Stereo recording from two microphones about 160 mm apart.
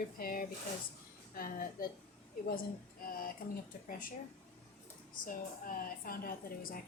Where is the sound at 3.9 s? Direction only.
60° left (ahead or behind).